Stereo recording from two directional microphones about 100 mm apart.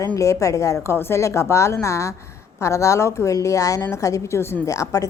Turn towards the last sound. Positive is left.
turn(degrees=35)  # may be behind; listen again after turning